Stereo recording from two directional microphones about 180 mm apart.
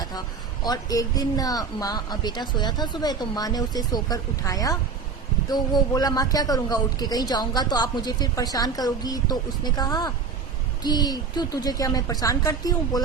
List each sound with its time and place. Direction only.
0.6 s speech: 20° left (ahead or behind)